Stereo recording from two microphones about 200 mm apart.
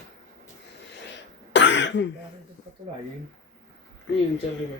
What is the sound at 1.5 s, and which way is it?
Throat clearing, 65° left (ahead or behind).